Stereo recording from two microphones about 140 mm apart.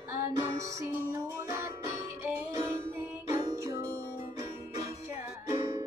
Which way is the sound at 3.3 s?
30° right (ahead or behind).